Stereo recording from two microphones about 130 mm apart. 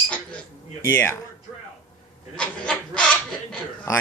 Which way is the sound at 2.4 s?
5° left (ahead or behind).